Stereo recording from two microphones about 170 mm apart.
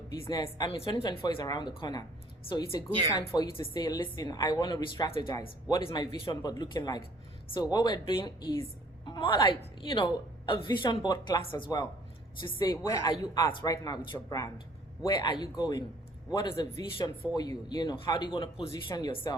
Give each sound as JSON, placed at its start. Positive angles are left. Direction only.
{"t": 0.3, "sound": "a woman's voice", "side_deg": 20}